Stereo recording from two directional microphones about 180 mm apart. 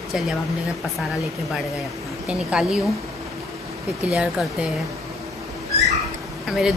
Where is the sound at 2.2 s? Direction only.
5° right (ahead or behind).